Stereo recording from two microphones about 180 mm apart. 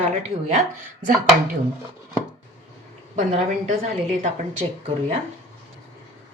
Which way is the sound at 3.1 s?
40° right (ahead or behind).